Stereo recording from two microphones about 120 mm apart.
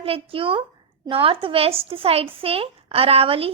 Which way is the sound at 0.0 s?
50° right (ahead or behind).